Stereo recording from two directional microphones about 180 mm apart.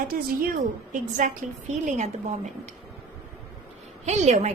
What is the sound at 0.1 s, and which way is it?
A woman's voice, 50° right (ahead or behind).